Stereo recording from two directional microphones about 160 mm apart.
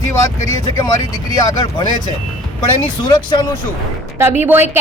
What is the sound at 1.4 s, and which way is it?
Speech, 25° left (ahead or behind).